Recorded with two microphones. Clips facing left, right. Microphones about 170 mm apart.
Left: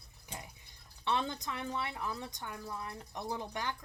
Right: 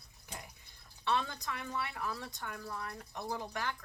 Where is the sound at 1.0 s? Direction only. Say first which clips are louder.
Even; 20° left (ahead or behind).